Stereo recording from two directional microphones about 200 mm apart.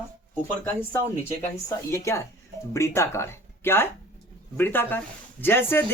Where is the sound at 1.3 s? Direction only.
15° left (ahead or behind).